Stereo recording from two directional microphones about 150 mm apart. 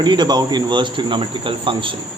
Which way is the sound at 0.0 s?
30° right (ahead or behind).